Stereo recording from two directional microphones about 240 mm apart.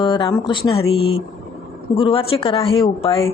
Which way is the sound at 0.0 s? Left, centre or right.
Centre.